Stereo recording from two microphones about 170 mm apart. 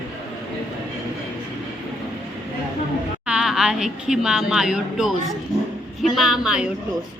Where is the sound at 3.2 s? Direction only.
5° right (ahead or behind).